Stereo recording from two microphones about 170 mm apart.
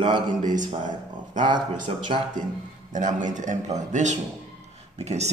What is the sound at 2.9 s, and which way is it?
A man's voice, 45° right (ahead or behind).